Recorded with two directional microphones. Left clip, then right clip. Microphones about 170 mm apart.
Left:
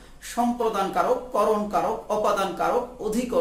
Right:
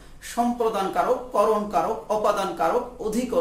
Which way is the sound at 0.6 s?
5° right (ahead or behind).